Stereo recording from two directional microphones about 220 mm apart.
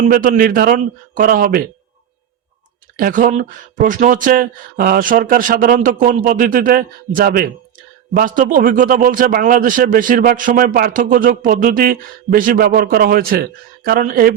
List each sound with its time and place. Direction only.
0.1 s speech: 40° right (ahead or behind)
3.0 s speech: 35° right (ahead or behind)